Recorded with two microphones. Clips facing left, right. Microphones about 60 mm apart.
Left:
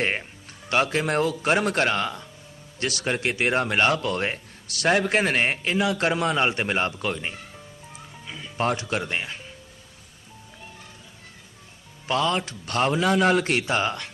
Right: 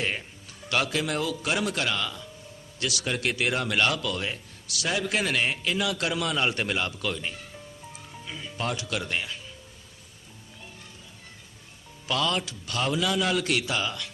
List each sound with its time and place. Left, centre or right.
0.0 s speech: left
5.7 s speech: left
8.5 s speech: left
12.0 s speech: left
12.5 s speech: left